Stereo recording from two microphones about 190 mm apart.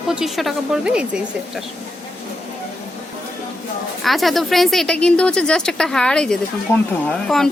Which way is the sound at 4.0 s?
Centre (ahead or behind).